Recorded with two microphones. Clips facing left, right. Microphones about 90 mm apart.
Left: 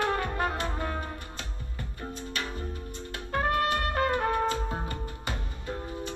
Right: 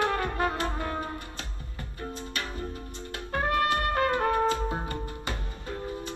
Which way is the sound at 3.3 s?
35° right (ahead or behind).